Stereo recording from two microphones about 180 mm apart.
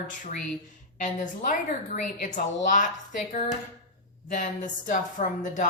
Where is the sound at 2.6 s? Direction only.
45° left (ahead or behind).